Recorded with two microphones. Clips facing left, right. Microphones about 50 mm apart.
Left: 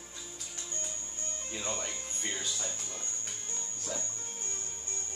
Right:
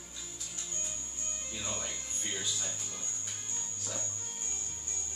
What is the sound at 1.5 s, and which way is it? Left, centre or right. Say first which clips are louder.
Speech: left 3 dB; left.